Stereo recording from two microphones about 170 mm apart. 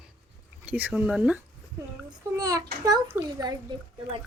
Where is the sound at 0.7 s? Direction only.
10° right (ahead or behind).